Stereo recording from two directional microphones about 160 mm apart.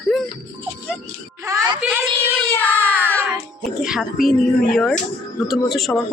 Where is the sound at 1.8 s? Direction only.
10° right (ahead or behind).